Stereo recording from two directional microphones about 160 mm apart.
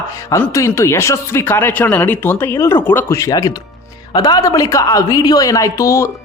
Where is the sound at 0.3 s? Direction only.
20° left (ahead or behind).